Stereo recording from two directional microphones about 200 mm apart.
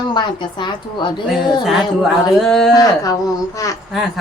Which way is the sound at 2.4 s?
Centre (ahead or behind).